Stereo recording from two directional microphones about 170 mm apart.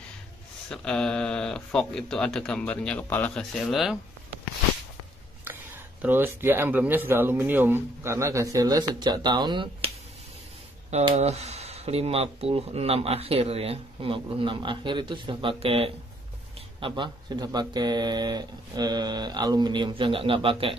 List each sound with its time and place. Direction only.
0.7 s speech: 5° left (ahead or behind)
6.0 s speech: 10° right (ahead or behind); by 9.8 s 30° right (ahead or behind)
10.9 s speech: 40° right (ahead or behind)